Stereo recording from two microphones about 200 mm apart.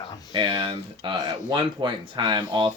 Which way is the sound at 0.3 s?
25° right (ahead or behind).